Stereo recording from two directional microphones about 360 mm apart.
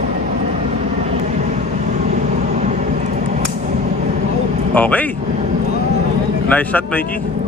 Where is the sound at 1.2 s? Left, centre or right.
Centre.